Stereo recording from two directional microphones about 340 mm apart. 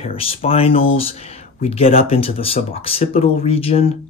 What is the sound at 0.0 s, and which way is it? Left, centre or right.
Speech, centre.